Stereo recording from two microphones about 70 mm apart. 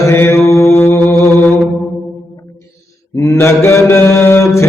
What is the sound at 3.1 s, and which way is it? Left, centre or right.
Mantra, left.